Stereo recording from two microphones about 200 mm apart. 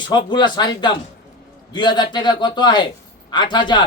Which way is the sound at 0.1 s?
20° left (ahead or behind).